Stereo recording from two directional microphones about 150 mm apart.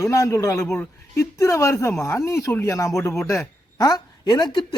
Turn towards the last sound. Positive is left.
turn(degrees=30)  # may be behind; listen again after turning